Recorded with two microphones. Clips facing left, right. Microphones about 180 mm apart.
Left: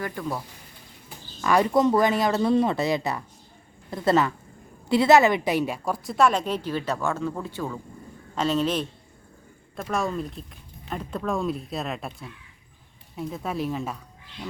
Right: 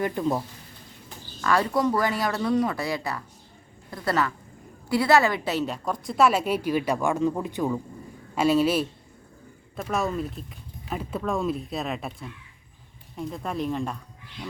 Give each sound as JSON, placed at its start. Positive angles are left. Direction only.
{"t": 0.0, "sound": "speech", "side_deg": -20}
{"t": 1.4, "sound": "a woman's voice", "side_deg": 15}